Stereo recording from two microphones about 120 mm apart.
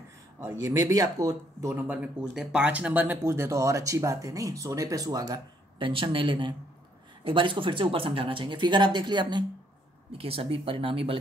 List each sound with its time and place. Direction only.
0.4 s speech: 25° right (ahead or behind)
10.1 s speech: 50° right (ahead or behind)